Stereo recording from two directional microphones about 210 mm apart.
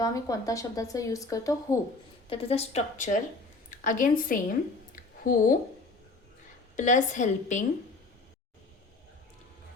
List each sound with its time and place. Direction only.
0.0 s a woman's voice: 15° left (ahead or behind)
2.3 s a woman's voice: 30° left (ahead or behind)
4.9 s a sound: 40° left (ahead or behind)
6.7 s a woman's voice: 35° left (ahead or behind)